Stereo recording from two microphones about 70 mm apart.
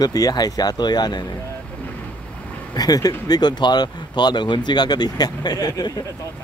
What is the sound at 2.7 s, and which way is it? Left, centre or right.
Speech, left.